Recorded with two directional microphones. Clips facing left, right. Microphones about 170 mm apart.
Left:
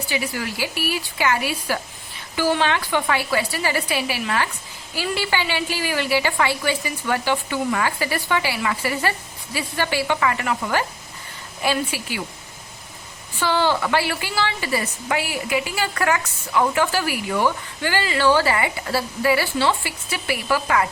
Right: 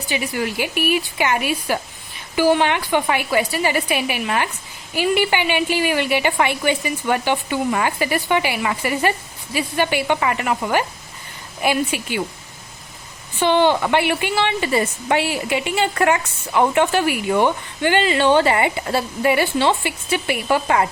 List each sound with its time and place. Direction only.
0.1 s a woman's voice: 20° right (ahead or behind)
13.4 s speech: 20° right (ahead or behind)